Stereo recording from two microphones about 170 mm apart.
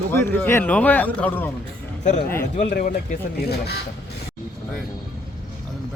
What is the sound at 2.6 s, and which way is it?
Speech, 50° left (ahead or behind).